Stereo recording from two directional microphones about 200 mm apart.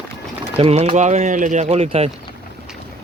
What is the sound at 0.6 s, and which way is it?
Speech, 30° right (ahead or behind).